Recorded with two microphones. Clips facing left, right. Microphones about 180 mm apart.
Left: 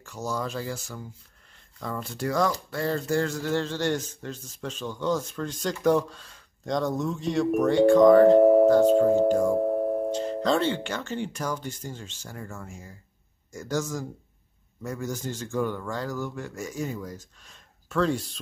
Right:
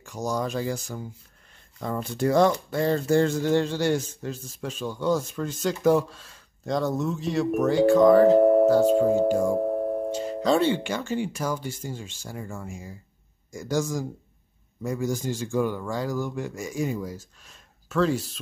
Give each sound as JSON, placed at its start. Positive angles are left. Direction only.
{"t": 0.0, "sound": "speech", "side_deg": -15}